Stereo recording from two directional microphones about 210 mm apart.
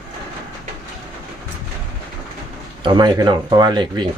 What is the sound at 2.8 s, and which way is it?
Speech, 20° right (ahead or behind).